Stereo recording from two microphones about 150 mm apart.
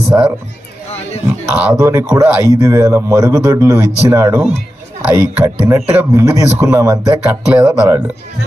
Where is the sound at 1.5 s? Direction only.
10° right (ahead or behind).